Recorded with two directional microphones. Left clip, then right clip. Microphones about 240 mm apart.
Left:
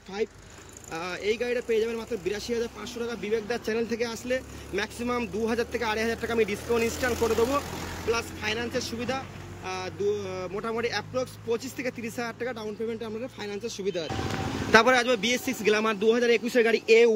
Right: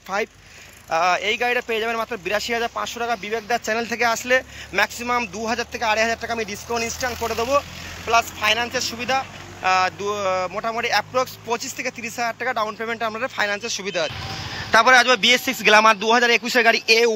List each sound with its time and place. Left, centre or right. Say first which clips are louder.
0.1 s speech: right 7 dB; centre
8.1 s a man's voice: right 11 dB; centre